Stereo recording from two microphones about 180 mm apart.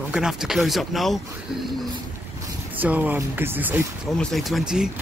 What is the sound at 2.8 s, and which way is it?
Speech, 10° right (ahead or behind).